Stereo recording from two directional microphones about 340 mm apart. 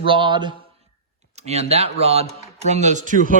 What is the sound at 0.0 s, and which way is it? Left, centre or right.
A man's voice, centre.